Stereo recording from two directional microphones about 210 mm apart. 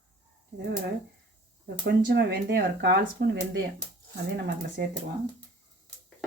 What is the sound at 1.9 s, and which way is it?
Speech, 50° right (ahead or behind).